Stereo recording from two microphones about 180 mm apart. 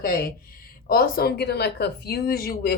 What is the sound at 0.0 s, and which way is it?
Speech, 55° left (ahead or behind).